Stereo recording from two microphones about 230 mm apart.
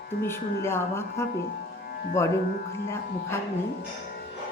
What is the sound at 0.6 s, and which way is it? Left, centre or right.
A woman's voice, centre.